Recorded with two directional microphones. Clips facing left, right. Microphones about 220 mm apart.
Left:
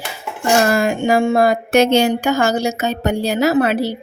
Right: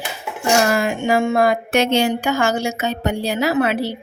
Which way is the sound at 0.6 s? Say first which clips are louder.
Left 3 dB; 45° left (ahead or behind).